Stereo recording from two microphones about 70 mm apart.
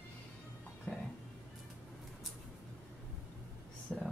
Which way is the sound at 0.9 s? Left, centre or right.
Left.